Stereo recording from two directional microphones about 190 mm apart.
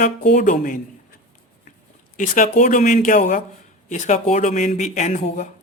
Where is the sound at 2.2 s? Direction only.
40° left (ahead or behind).